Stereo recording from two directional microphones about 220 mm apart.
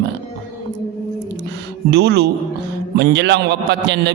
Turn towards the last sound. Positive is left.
turn(degrees=-50)  # may be behind; listen again after turning